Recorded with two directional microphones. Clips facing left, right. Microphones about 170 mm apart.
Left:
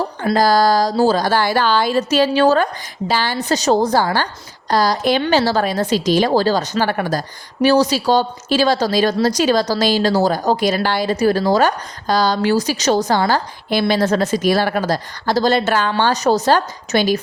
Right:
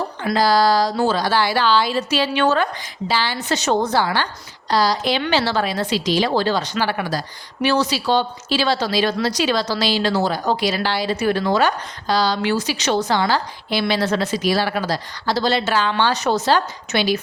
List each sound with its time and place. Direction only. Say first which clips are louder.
0.3 s a woman's voice: left 2 dB; 45° left (ahead or behind)